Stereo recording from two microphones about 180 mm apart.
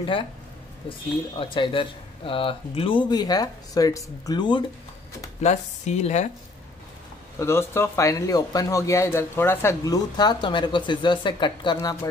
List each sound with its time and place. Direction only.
0.0 s speech: 30° left (ahead or behind)
5.4 s speech: 40° left (ahead or behind)
7.3 s speech: 15° left (ahead or behind)